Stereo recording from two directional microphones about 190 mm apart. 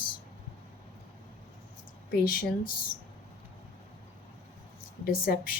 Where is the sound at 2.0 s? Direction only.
50° left (ahead or behind).